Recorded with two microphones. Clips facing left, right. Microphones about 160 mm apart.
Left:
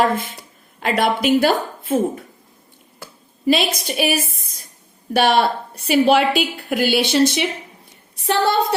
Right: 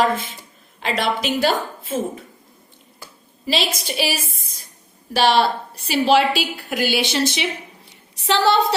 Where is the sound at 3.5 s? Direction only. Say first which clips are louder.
Left 2 dB; 55° left (ahead or behind).